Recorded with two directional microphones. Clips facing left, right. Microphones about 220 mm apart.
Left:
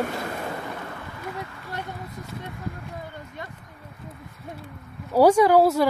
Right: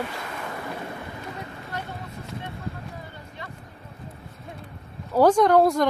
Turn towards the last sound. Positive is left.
turn(degrees=5)  # may be behind; listen again after turning